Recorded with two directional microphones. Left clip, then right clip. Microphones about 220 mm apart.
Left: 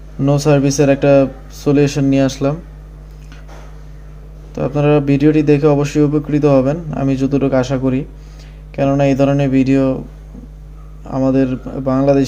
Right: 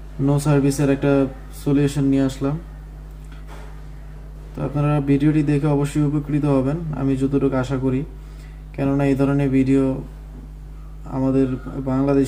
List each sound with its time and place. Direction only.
0.3 s speech: 40° left (ahead or behind)
4.6 s speech: 40° left (ahead or behind)
11.1 s speech: 35° left (ahead or behind)